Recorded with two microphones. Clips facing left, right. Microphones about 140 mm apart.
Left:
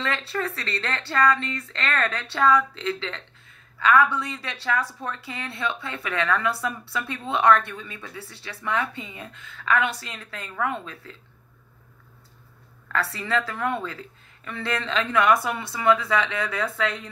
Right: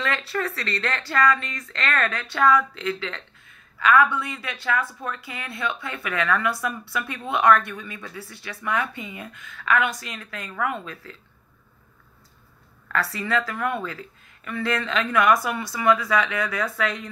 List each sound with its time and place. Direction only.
0.0 s a woman's voice: 30° left (ahead or behind)
12.9 s a woman's voice: 25° left (ahead or behind)